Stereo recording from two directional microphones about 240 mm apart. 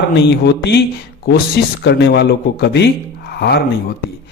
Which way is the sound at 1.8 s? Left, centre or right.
Left.